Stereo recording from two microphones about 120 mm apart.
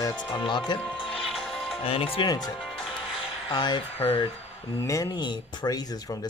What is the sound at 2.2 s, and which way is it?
Speech, 35° left (ahead or behind).